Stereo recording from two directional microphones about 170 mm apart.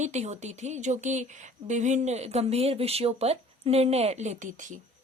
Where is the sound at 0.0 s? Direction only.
45° right (ahead or behind).